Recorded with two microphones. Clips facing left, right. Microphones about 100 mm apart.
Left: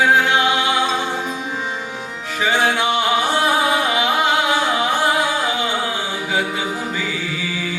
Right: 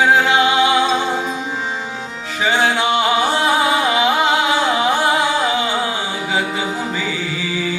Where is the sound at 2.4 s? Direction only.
25° right (ahead or behind).